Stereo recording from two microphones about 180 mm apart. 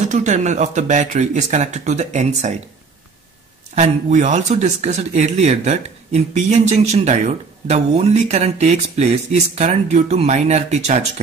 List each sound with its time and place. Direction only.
0.1 s speech: 40° right (ahead or behind)
3.7 s speech: 40° right (ahead or behind)